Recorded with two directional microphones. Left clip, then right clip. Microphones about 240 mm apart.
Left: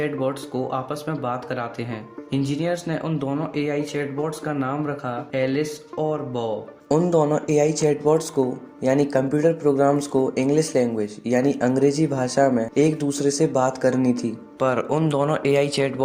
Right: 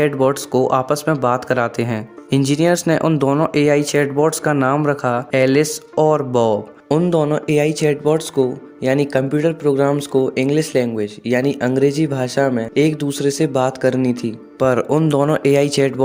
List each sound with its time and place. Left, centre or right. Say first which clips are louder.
0.0 s speech: right 9 dB; right